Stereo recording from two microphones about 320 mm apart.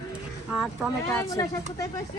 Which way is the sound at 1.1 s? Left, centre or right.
Centre.